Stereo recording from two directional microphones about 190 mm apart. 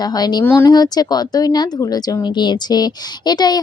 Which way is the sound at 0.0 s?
20° left (ahead or behind).